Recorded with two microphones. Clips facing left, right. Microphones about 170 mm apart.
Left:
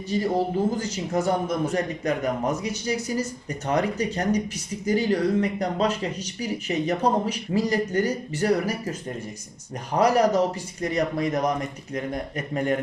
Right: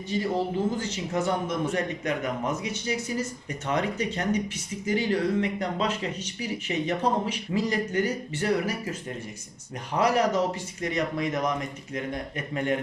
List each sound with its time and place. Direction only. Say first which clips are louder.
0.1 s speech: left 3 dB; 40° left (ahead or behind)
10.0 s speech: left 4 dB; 40° left (ahead or behind)